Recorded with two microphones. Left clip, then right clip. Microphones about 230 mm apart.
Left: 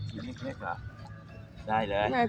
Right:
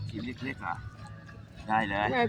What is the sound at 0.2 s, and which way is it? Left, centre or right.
Speech, right.